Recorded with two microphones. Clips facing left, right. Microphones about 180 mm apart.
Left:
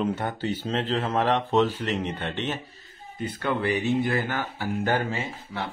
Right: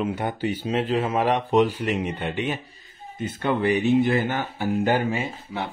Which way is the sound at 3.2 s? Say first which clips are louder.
Right 3 dB; 20° right (ahead or behind).